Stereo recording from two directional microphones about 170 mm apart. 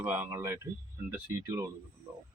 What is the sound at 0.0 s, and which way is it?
Speech, 10° right (ahead or behind).